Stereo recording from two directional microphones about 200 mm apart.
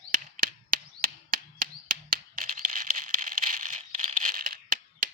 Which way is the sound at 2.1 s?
40° right (ahead or behind).